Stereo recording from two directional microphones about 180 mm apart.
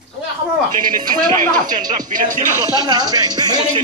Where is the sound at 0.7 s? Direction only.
50° right (ahead or behind).